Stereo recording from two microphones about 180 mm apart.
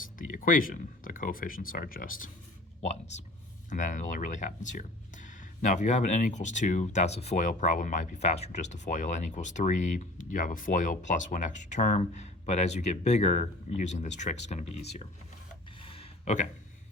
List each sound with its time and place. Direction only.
0.2 s speech: 50° left (ahead or behind)
3.7 s speech: 45° left (ahead or behind)
15.8 s a sound: 30° left (ahead or behind)